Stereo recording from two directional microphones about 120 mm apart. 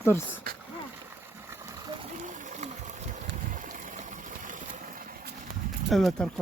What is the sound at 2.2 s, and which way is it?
Run, 90° right.